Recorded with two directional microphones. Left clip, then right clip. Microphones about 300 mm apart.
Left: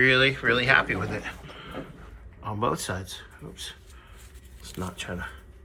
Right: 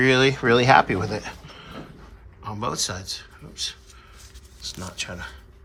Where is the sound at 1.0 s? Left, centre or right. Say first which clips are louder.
Right 3 dB; centre.